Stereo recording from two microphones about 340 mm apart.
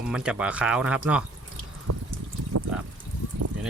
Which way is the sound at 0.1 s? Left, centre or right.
Centre.